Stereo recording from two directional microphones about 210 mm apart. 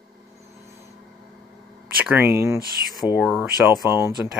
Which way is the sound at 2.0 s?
10° right (ahead or behind).